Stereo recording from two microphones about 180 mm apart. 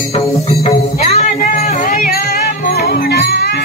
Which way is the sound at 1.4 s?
50° left (ahead or behind).